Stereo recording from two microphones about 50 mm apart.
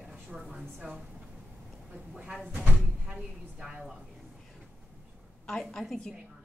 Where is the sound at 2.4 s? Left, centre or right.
Right.